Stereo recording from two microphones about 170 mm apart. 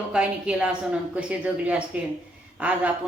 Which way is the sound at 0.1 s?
5° right (ahead or behind).